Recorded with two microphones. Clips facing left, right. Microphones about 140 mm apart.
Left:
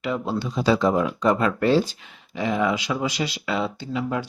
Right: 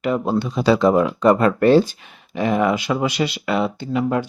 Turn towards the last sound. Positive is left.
turn(degrees=-55)  # may be behind; listen again after turning